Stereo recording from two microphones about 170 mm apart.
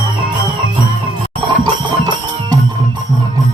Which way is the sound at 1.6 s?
25° right (ahead or behind).